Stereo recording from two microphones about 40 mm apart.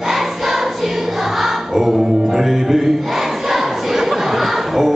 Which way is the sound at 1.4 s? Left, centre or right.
Centre.